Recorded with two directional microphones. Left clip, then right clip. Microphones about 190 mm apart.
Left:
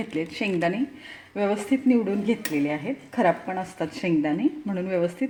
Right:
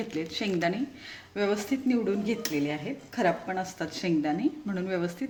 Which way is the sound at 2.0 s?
25° left (ahead or behind).